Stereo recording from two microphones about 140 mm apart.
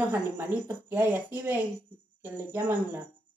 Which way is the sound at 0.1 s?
15° right (ahead or behind).